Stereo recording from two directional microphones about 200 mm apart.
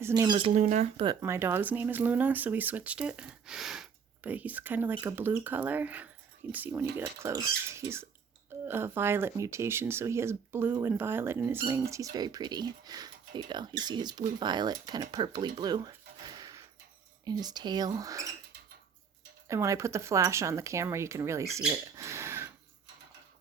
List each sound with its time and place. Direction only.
0.0 s speech: 20° right (ahead or behind)
0.5 s speech: 35° right (ahead or behind)
1.0 s speech: 10° right (ahead or behind)
19.5 s speech: 15° right (ahead or behind)